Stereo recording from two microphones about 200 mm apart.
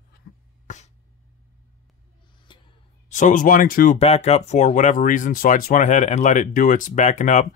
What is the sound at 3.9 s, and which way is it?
Speech, 30° left (ahead or behind).